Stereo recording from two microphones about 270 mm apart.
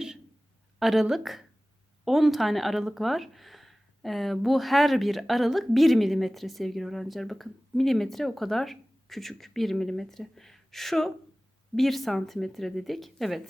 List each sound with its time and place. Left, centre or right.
0.8 s speech: centre